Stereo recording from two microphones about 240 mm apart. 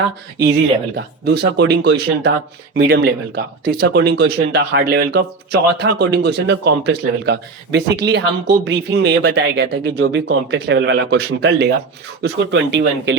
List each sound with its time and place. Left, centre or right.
0.9 s speech: right